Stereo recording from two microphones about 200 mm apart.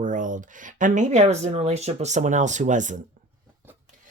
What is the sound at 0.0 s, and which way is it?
Speech, 40° right (ahead or behind).